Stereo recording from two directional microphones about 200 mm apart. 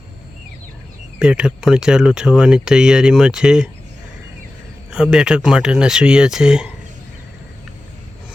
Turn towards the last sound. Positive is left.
turn(degrees=-5)  # may be behind; listen again after turning